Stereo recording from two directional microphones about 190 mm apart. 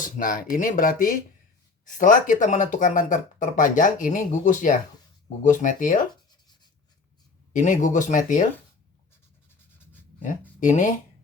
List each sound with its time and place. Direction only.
0.0 s speech: 45° left (ahead or behind)
7.5 s speech: 40° left (ahead or behind)
9.7 s writing: 10° left (ahead or behind)
10.6 s speech: 40° left (ahead or behind)